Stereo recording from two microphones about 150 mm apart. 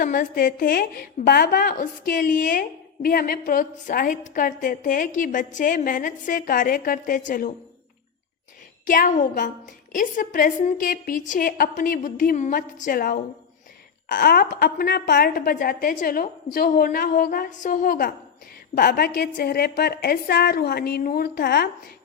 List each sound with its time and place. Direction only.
0.0 s a woman's voice: 65° left (ahead or behind)
8.9 s a woman's voice: 65° left (ahead or behind)
18.8 s a woman's voice: 80° left